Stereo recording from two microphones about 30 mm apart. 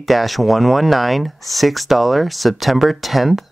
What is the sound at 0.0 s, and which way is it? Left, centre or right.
Speech, centre.